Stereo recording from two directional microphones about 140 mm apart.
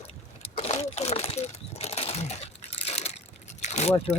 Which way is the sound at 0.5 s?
50° left (ahead or behind).